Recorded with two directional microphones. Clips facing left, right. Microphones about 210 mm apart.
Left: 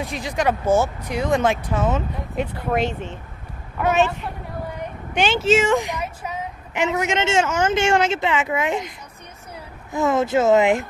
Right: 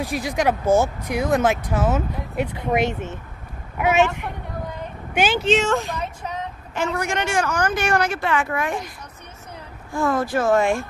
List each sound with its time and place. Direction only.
0.0 s speech: 5° right (ahead or behind)
5.1 s a woman's voice: 5° right (ahead or behind); by 8.9 s 20° left (ahead or behind)
9.9 s a woman's voice: 20° left (ahead or behind)